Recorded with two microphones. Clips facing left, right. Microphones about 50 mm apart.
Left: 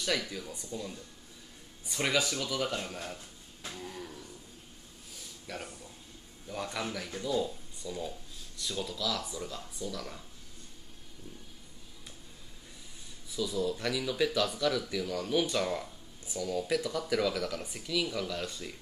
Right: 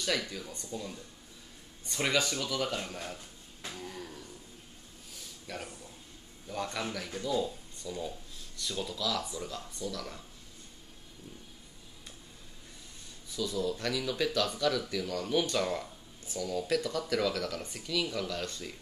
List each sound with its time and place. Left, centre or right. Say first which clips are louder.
0.3 s speech: even; centre
5.5 s speech: even; centre
13.3 s speech: left 1 dB; centre